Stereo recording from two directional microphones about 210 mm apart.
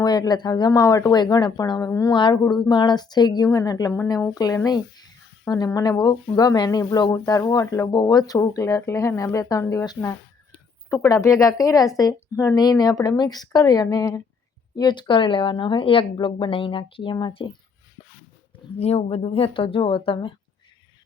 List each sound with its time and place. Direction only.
0.0 s speech: 20° left (ahead or behind)
18.8 s speech: 30° left (ahead or behind)